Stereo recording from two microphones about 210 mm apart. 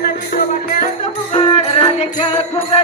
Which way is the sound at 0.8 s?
30° left (ahead or behind).